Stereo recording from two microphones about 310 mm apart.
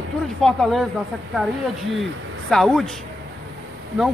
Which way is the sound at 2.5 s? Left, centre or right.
Centre.